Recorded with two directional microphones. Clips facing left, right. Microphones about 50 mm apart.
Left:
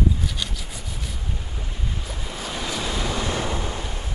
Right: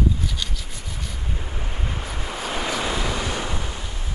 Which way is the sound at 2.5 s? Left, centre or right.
Right.